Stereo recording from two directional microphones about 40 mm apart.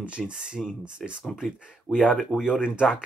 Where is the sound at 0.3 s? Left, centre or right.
Centre.